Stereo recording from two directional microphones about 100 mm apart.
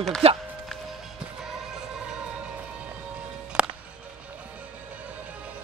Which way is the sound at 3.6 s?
10° right (ahead or behind).